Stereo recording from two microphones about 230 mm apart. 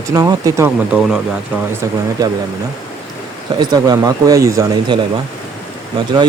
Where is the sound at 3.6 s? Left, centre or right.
Centre.